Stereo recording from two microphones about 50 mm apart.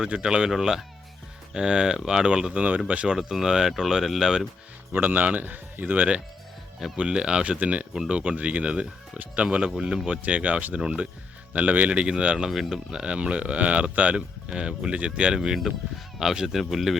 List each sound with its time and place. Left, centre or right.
0.0 s speech: centre
3.2 s speech: centre
4.9 s a man's voice: right
6.9 s speech: centre
10.2 s speech: right
10.8 s speech: centre
11.5 s speech: right
12.5 s speech: centre
12.9 s speech: right
14.2 s speech: centre
15.4 s speech: centre